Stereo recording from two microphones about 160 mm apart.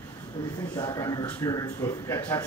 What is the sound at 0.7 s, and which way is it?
A man's voice, 25° left (ahead or behind).